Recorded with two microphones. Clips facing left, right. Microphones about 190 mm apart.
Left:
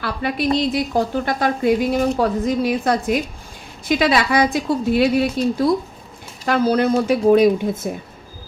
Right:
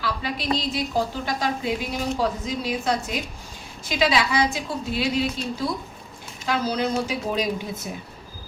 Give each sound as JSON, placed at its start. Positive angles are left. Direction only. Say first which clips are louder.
{"t": 0.0, "sound": "a woman's voice", "louder": "left 7 dB", "side_deg": 55}